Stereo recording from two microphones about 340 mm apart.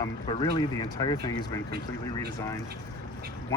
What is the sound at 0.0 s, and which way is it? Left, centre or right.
Speech, centre.